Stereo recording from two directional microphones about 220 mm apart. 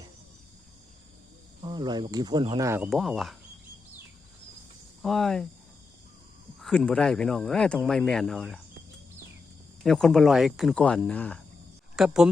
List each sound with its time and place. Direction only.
1.6 s speech: 20° right (ahead or behind)
2.9 s speech: centre (ahead or behind)
5.0 s speech: centre (ahead or behind)
6.6 s speech: 5° left (ahead or behind)
9.8 s speech: centre (ahead or behind)